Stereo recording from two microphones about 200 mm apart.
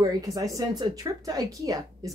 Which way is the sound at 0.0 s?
15° right (ahead or behind).